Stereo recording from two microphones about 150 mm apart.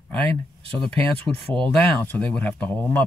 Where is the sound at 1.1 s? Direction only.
10° left (ahead or behind).